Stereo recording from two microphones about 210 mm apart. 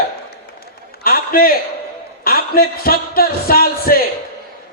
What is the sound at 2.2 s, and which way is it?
A man's voice, 45° left (ahead or behind).